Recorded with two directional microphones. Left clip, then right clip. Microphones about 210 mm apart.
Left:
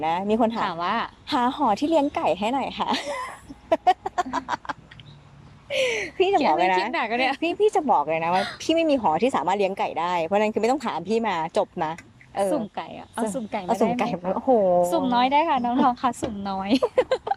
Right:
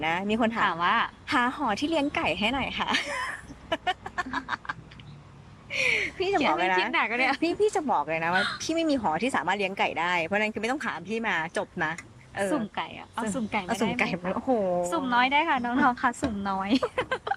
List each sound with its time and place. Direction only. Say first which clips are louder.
0.0 s a woman's voice: left 4 dB; 20° left (ahead or behind)